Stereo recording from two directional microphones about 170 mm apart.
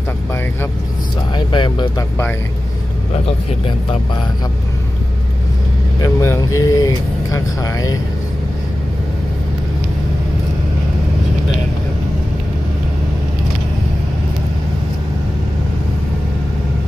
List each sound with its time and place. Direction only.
1.3 s vehicle: 25° left (ahead or behind)
6.0 s speech: 20° left (ahead or behind)